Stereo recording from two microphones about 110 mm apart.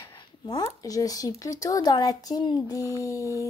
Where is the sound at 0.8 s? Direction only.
35° left (ahead or behind).